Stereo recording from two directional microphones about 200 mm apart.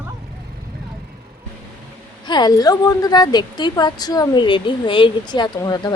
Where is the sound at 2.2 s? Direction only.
20° left (ahead or behind).